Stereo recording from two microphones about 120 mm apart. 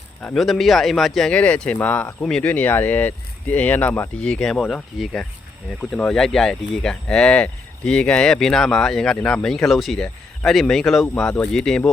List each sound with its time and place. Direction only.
0.3 s speech: centre (ahead or behind)